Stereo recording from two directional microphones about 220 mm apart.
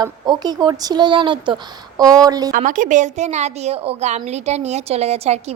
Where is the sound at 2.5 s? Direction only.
35° right (ahead or behind).